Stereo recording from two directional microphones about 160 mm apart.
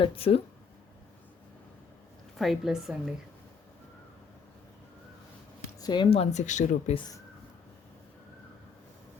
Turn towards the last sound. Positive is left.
turn(degrees=25)  # may be behind; listen again after turning